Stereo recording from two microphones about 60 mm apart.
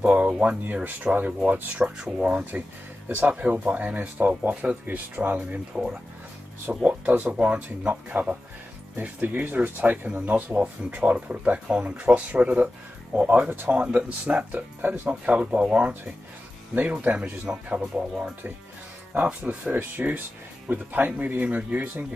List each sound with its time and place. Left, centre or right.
0.0 s speech: right
13.7 s speech: right
19.7 s speech: right